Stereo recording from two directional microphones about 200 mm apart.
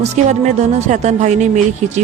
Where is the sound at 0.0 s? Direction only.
35° right (ahead or behind).